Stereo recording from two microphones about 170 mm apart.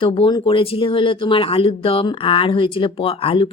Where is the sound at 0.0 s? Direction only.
30° left (ahead or behind).